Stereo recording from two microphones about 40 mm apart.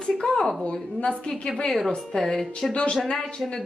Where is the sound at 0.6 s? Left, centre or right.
Left.